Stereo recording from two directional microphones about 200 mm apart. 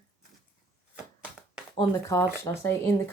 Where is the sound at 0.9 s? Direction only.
5° right (ahead or behind).